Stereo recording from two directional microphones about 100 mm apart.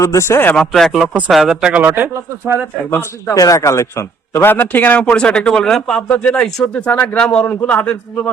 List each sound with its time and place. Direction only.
0.0 s a man's voice: 30° left (ahead or behind)
0.5 s speech: 5° left (ahead or behind)
1.8 s speech: 20° right (ahead or behind)
2.9 s a man's voice: 25° left (ahead or behind)